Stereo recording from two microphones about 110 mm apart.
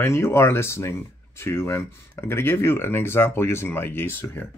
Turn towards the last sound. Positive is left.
turn(degrees=20)  # may be behind; listen again after turning